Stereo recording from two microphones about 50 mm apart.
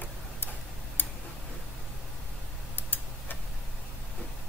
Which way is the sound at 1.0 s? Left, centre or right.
Left.